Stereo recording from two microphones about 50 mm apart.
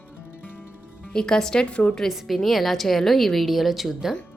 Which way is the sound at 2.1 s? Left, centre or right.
Centre.